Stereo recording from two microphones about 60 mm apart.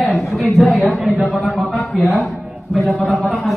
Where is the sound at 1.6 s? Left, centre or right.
Centre.